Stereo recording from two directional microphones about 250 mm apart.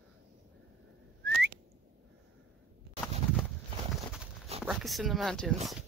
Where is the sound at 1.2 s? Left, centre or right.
Right.